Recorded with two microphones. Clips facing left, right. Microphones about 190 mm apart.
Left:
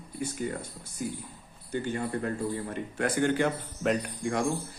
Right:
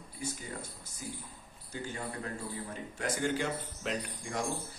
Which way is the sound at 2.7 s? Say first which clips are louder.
Left 7 dB; 60° left (ahead or behind).